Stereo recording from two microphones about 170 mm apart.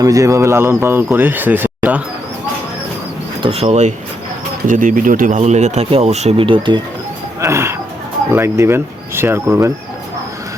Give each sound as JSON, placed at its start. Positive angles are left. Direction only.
{"t": 0.0, "sound": "speech", "side_deg": -20}
{"t": 3.4, "sound": "speech", "side_deg": -35}
{"t": 7.4, "sound": "speech", "side_deg": -15}